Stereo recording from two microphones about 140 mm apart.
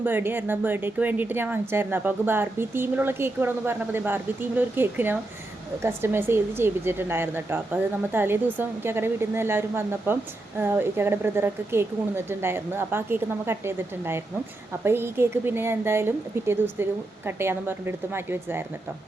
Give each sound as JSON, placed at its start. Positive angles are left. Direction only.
{"t": 0.0, "sound": "speech", "side_deg": -15}